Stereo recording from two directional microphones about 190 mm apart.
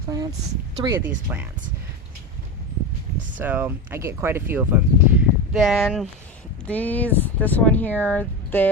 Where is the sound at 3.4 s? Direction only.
10° right (ahead or behind).